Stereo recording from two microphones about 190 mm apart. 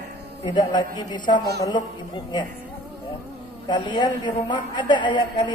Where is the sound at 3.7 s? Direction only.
25° left (ahead or behind).